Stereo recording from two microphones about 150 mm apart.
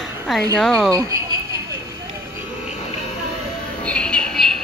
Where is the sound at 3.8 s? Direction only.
5° left (ahead or behind).